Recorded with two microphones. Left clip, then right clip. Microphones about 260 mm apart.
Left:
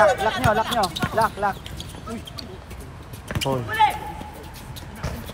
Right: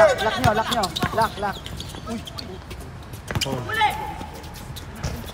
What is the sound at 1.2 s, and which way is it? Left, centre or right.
Speech, left.